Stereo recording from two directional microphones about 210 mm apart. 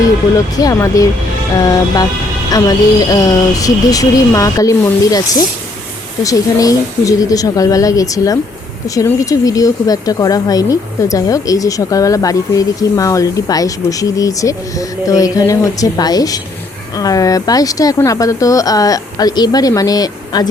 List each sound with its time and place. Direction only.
0.6 s speech: 15° left (ahead or behind)